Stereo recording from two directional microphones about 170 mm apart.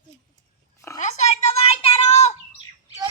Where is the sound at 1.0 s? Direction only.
45° left (ahead or behind).